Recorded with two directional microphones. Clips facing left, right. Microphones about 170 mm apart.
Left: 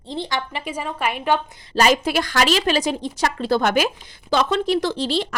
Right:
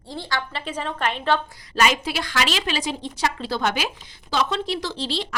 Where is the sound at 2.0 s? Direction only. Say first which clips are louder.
Left 5 dB; 45° left (ahead or behind).